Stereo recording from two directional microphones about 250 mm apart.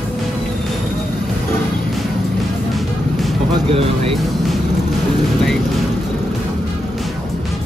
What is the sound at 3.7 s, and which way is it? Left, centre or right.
Music, right.